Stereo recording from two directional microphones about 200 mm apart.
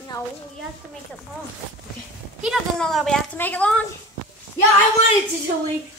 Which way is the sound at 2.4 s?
Centre (ahead or behind).